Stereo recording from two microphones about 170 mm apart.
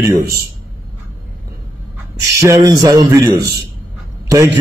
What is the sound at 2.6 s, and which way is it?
A man's voice, 25° right (ahead or behind).